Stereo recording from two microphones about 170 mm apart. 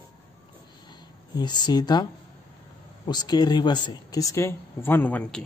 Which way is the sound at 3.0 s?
25° left (ahead or behind).